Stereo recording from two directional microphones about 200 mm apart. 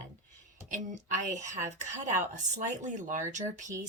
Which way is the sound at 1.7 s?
35° right (ahead or behind).